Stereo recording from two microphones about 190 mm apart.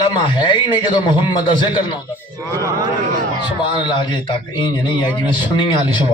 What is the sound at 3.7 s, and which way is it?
A man's voice, 25° left (ahead or behind).